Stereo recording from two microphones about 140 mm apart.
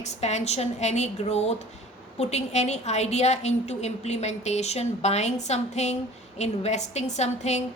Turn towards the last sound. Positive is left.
turn(degrees=55)  # may be behind; listen again after turning